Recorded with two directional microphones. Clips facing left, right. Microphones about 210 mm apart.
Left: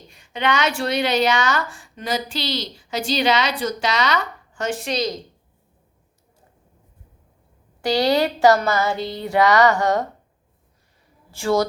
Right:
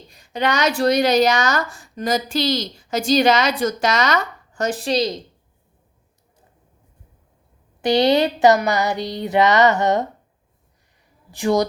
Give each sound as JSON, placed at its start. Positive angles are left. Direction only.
{"t": 0.1, "sound": "speech", "side_deg": -40}
{"t": 7.8, "sound": "a sound", "side_deg": -20}
{"t": 11.3, "sound": "speech", "side_deg": -20}